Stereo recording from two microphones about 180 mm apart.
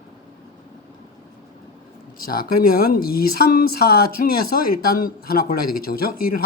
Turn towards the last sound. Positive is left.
turn(degrees=55)  # may be behind; listen again after turning